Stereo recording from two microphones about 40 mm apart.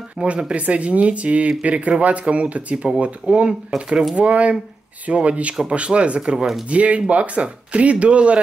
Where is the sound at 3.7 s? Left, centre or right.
Centre.